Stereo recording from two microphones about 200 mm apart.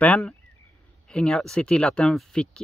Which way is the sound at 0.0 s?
5° left (ahead or behind).